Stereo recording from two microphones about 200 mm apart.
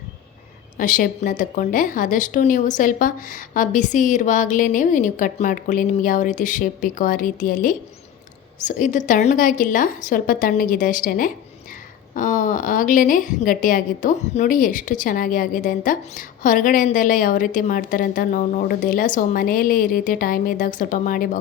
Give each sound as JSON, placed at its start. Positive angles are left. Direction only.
{"t": 0.8, "sound": "a woman's voice", "side_deg": 40}